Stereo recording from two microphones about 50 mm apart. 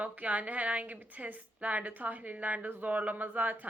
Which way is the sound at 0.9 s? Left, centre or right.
Right.